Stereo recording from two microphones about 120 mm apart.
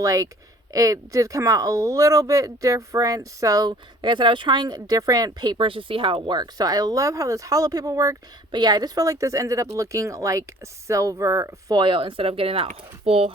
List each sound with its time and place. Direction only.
0.0 s speech: 25° right (ahead or behind); by 13.3 s 60° right (ahead or behind)